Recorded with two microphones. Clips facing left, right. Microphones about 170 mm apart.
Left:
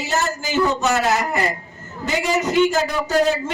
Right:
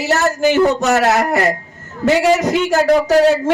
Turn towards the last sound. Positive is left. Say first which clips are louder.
# right 6 dB
turn(degrees=-65)  # may be behind; listen again after turning